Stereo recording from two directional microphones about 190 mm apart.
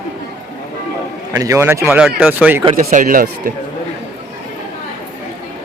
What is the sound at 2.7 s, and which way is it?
Speech, 45° right (ahead or behind).